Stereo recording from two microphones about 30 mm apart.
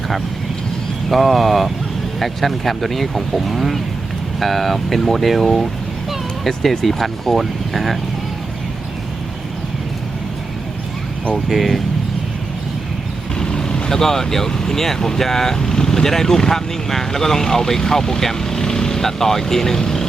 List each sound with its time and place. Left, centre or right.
1.1 s speech: centre
11.4 s speech: centre
13.4 s vehicle: left
13.9 s speech: centre